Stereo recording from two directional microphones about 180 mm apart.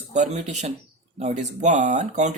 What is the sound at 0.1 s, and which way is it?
Speech, 40° right (ahead or behind).